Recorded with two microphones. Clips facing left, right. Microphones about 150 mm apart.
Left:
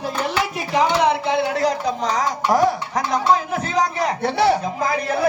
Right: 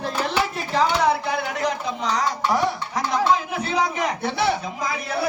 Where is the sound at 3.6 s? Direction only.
40° left (ahead or behind).